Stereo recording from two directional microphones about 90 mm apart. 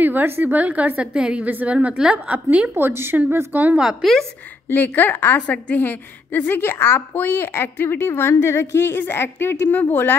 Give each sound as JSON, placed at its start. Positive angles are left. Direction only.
{"t": 0.0, "sound": "a woman's voice", "side_deg": -20}
{"t": 2.7, "sound": "speech", "side_deg": -25}
{"t": 3.8, "sound": "a woman's voice", "side_deg": 0}
{"t": 4.6, "sound": "a woman's voice", "side_deg": 20}